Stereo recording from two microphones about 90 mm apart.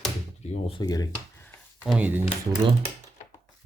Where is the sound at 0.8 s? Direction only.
45° left (ahead or behind).